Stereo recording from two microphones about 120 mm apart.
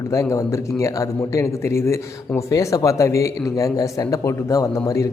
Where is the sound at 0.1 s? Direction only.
25° left (ahead or behind).